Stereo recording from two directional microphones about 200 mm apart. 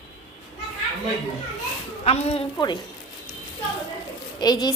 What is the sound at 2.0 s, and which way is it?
Speech, 30° left (ahead or behind).